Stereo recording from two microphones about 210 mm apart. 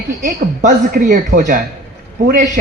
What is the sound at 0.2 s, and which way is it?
A woman's voice, 40° right (ahead or behind).